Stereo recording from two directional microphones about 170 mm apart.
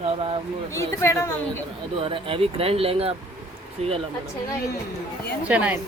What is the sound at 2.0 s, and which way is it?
A woman's voice, 35° right (ahead or behind).